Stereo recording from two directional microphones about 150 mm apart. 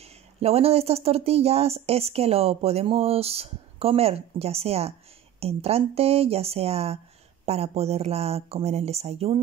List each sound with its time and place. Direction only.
0.0 s speech: 45° right (ahead or behind)